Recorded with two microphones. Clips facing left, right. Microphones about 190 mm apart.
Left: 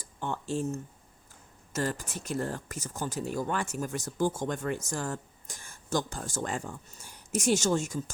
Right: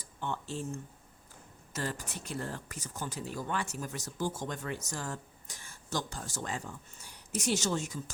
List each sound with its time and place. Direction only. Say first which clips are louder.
0.0 s speech: left 3 dB; 45° left (ahead or behind)